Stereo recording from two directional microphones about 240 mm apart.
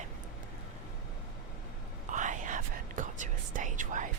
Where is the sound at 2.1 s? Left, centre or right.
Right.